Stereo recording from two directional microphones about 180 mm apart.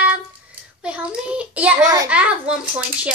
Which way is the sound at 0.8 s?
5° right (ahead or behind).